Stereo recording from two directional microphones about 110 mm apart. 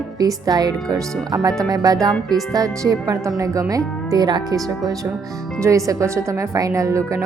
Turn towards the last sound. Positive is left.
turn(degrees=-30)  # may be behind; listen again after turning